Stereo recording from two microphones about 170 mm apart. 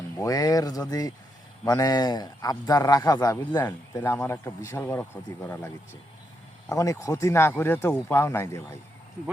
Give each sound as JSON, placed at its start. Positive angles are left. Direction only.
{"t": 0.2, "sound": "a man's voice", "side_deg": 20}
{"t": 6.7, "sound": "speech", "side_deg": 15}